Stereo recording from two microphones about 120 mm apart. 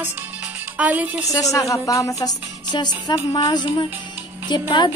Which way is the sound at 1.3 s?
30° left (ahead or behind).